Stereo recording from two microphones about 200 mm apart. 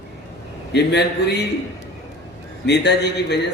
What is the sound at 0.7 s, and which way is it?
Speech, 55° left (ahead or behind).